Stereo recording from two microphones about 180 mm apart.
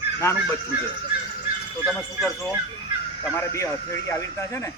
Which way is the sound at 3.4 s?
15° left (ahead or behind).